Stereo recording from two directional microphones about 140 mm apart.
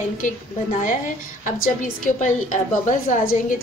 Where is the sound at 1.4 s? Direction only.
65° left (ahead or behind).